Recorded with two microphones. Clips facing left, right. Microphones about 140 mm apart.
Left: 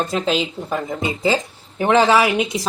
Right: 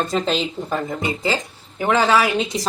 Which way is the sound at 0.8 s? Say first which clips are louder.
Left 3 dB; 20° left (ahead or behind).